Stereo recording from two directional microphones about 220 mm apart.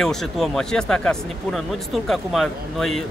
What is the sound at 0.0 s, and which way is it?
Speech, centre (ahead or behind).